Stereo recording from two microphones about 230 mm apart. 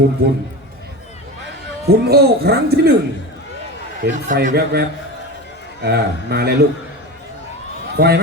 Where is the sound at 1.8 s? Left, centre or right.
Right.